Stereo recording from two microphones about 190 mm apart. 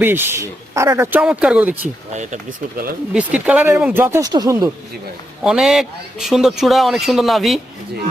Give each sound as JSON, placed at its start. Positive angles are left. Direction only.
{"t": 0.0, "sound": "speech", "side_deg": -10}
{"t": 2.1, "sound": "speech", "side_deg": -40}
{"t": 3.1, "sound": "speech", "side_deg": -5}
{"t": 5.4, "sound": "speech", "side_deg": 0}